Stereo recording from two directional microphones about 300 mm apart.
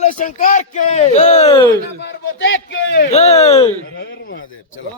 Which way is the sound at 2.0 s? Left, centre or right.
Left.